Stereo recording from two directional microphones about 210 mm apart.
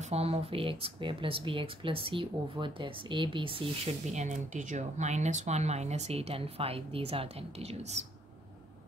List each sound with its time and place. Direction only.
0.1 s speech: 30° right (ahead or behind)